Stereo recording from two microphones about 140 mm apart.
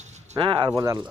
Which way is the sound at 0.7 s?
25° right (ahead or behind).